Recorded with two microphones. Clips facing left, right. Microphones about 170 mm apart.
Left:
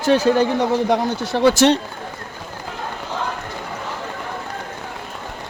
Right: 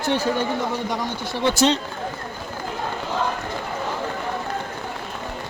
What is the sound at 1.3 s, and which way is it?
Speech, 90° left.